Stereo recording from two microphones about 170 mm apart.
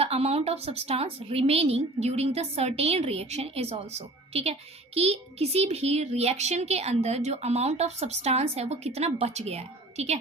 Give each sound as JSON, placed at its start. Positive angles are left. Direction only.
{"t": 0.0, "sound": "a child's voice", "side_deg": -35}